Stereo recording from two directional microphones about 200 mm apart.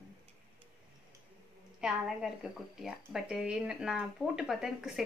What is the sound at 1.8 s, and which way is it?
Speech, centre (ahead or behind).